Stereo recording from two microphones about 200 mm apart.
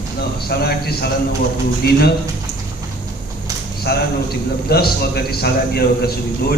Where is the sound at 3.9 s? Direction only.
50° left (ahead or behind).